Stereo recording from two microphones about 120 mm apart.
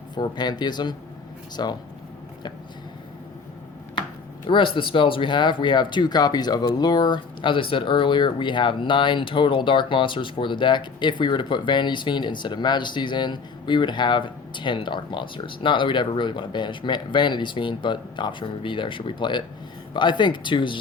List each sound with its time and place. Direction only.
0.2 s speech: 35° left (ahead or behind)
4.4 s speech: 45° left (ahead or behind)